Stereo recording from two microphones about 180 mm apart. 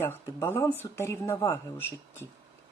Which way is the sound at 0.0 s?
15° left (ahead or behind).